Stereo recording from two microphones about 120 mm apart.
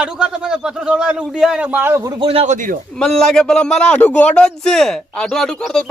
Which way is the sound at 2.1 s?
50° right (ahead or behind).